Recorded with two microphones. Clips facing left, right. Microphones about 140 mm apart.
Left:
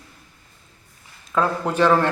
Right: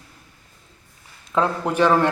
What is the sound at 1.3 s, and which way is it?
Speech, 15° right (ahead or behind).